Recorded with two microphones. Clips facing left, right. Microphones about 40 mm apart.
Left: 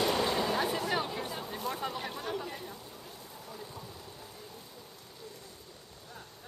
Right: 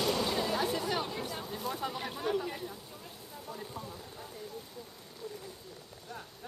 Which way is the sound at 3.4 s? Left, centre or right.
Centre.